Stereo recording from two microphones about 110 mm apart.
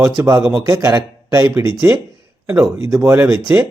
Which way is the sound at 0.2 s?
20° right (ahead or behind).